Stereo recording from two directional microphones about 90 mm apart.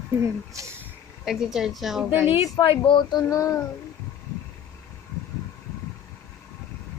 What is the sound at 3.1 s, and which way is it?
Speech, 40° left (ahead or behind).